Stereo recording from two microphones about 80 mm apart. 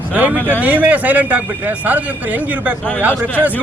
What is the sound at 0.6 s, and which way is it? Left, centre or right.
Speech, right.